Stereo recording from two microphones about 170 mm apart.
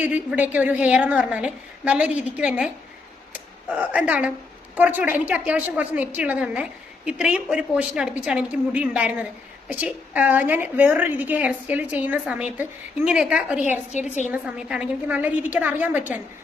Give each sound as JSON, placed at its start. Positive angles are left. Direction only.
{"t": 0.0, "sound": "a woman's voice", "side_deg": -10}
{"t": 13.9, "sound": "a woman's voice", "side_deg": 45}
{"t": 14.3, "sound": "a woman's voice", "side_deg": -5}